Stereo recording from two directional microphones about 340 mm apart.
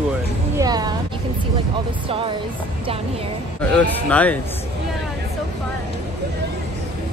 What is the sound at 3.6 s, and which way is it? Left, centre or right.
Speech, centre.